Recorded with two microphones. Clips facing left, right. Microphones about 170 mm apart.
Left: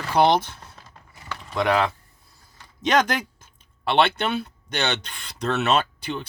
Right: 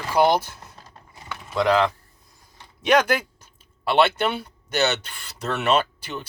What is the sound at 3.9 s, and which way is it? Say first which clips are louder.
Speech: right 1 dB; 10° right (ahead or behind).